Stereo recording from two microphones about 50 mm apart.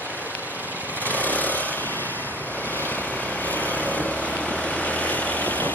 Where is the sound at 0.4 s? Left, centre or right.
Right.